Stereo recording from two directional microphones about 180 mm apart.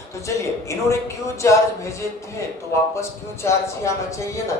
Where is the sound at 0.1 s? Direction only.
15° left (ahead or behind).